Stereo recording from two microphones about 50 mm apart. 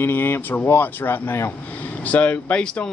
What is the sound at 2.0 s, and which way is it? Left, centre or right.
Speech, left.